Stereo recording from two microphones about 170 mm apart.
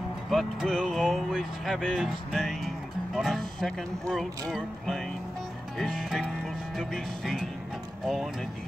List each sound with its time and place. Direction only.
0.3 s speech: centre (ahead or behind)